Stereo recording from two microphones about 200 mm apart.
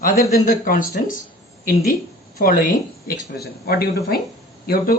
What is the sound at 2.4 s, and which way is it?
Speech, 45° left (ahead or behind).